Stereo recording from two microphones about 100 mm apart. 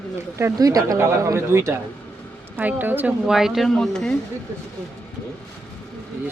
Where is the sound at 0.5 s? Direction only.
35° right (ahead or behind).